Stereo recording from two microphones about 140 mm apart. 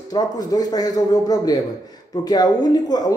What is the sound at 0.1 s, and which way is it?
Speech, 25° left (ahead or behind).